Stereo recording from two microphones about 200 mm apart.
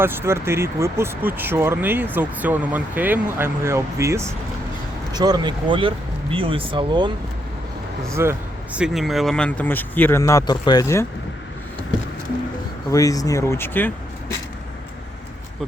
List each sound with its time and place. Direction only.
0.0 s speech: 10° right (ahead or behind)
8.0 s speech: 15° right (ahead or behind); by 11.0 s 15° left (ahead or behind)
12.9 s speech: 15° left (ahead or behind)